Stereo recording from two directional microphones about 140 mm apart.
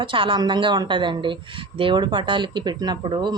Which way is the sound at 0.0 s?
35° right (ahead or behind).